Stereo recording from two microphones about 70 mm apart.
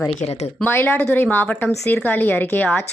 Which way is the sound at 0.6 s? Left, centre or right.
Left.